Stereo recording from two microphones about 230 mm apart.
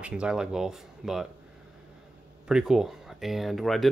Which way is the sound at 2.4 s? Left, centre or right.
Centre.